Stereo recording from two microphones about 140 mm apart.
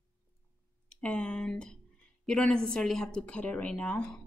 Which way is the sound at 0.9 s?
10° left (ahead or behind).